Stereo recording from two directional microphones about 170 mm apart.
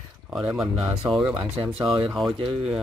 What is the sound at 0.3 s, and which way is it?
Speech, 5° right (ahead or behind).